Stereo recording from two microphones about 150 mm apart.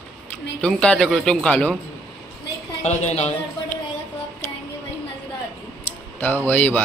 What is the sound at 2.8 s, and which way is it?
Speech, 50° left (ahead or behind).